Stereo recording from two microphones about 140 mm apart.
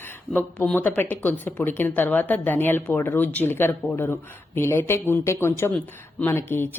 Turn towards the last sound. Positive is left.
turn(degrees=15)  # may be behind; listen again after turning